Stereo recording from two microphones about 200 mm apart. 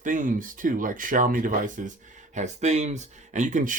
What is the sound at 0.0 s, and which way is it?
Speech, 40° right (ahead or behind).